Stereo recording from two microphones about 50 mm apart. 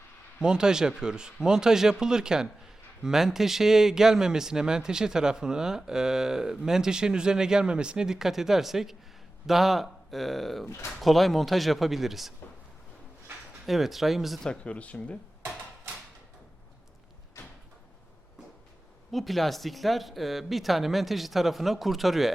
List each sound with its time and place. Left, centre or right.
0.3 s speech: centre
13.7 s speech: centre
14.6 s speech: left
19.1 s speech: centre